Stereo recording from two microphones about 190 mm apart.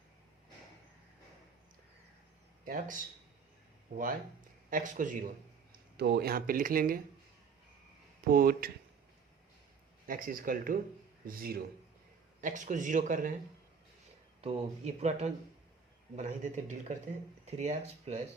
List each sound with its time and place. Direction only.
2.6 s speech: 45° right (ahead or behind)
4.7 s speech: 45° right (ahead or behind)
6.0 s speech: 60° right (ahead or behind)
8.3 s speech: 50° right (ahead or behind)
10.1 s speech: 50° right (ahead or behind)
14.4 s speech: 35° right (ahead or behind)